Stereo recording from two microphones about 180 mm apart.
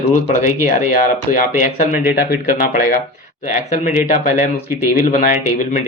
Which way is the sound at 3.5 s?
40° left (ahead or behind).